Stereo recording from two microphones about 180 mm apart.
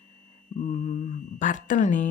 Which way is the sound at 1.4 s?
45° left (ahead or behind).